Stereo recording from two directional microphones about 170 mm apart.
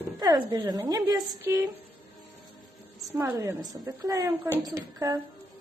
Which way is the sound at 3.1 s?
15° right (ahead or behind).